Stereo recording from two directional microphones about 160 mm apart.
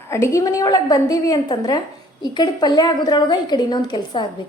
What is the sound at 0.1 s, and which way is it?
A woman's voice, 20° left (ahead or behind).